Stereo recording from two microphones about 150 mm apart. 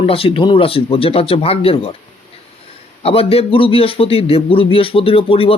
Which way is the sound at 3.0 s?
40° left (ahead or behind).